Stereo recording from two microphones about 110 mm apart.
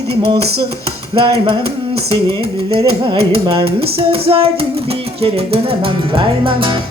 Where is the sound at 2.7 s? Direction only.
60° right (ahead or behind).